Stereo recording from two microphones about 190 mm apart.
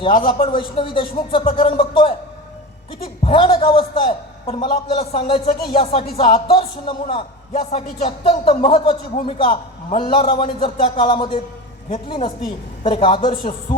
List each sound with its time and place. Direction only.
0.0 s a man's voice: 30° left (ahead or behind)
3.2 s a man's voice: 30° left (ahead or behind)